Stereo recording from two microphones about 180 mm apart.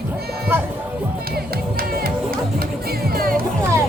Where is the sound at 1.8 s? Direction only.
55° right (ahead or behind).